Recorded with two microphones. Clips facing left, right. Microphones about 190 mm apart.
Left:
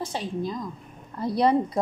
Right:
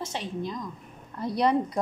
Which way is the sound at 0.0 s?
35° left (ahead or behind).